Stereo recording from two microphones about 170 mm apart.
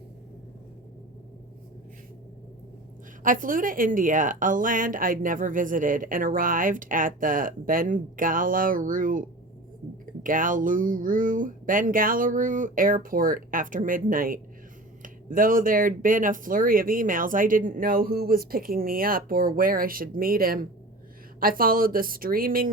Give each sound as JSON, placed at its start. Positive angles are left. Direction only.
{"t": 3.2, "sound": "a woman's voice", "side_deg": -55}
{"t": 10.2, "sound": "a woman's voice", "side_deg": -50}